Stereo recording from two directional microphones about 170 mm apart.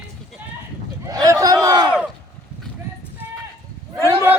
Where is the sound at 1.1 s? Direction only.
20° right (ahead or behind).